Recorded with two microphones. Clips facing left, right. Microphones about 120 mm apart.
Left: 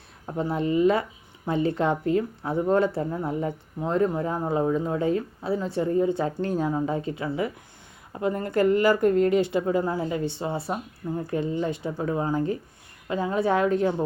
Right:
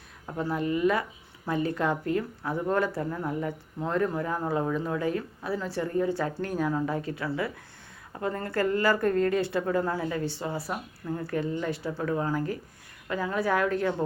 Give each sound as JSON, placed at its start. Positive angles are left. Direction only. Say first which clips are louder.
{"t": 0.3, "sound": "speech", "louder": "left 3 dB", "side_deg": 20}